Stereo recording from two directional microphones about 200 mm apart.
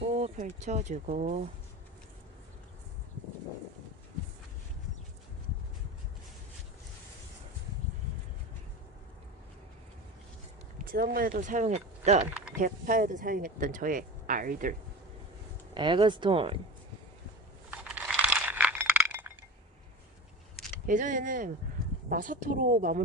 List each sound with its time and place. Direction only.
0.2 s speech: 35° right (ahead or behind)
10.8 s speech: 45° right (ahead or behind)
15.7 s speech: 25° right (ahead or behind)
17.7 s a sound: 5° right (ahead or behind)
20.8 s speech: 40° right (ahead or behind)